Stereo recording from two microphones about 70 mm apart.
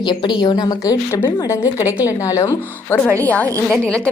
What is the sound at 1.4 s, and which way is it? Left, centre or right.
A woman's voice, left.